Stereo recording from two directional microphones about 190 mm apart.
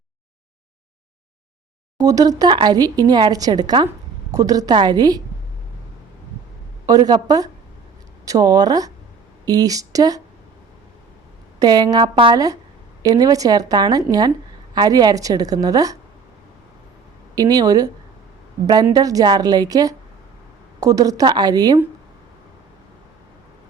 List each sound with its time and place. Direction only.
2.0 s a woman's voice: 20° right (ahead or behind)
6.8 s speech: 20° right (ahead or behind)
11.6 s speech: 20° right (ahead or behind)
17.3 s speech: 20° right (ahead or behind)